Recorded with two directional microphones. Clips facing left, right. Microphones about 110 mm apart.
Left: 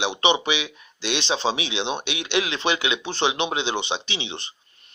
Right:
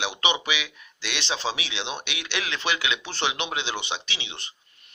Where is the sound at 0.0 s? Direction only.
25° left (ahead or behind).